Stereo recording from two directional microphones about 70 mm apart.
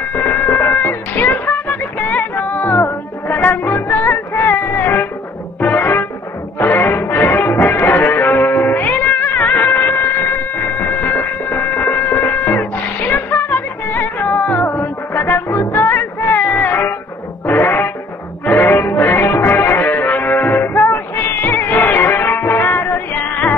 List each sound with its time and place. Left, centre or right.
0.3 s music: left